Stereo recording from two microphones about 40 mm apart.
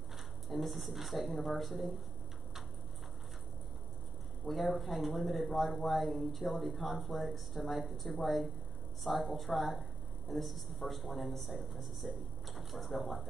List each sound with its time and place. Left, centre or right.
0.5 s speech: centre
4.5 s speech: centre